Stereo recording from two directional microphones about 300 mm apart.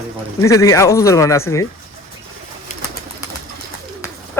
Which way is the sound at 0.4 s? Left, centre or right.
Centre.